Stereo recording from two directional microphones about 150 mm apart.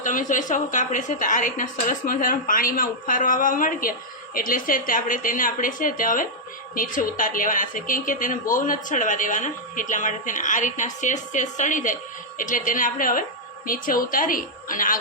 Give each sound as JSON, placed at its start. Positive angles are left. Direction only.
{"t": 0.0, "sound": "a woman's voice", "side_deg": 60}